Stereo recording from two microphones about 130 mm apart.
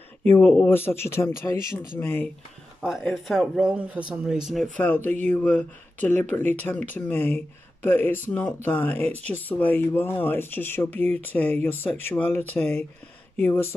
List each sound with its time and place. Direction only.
0.2 s speech: 10° left (ahead or behind)
2.8 s speech: centre (ahead or behind)
4.8 s speech: 15° left (ahead or behind)